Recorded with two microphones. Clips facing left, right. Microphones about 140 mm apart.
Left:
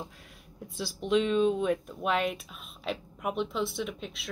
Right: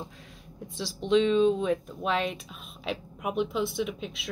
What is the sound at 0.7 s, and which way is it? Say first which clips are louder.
Speech: right 3 dB; 5° left (ahead or behind).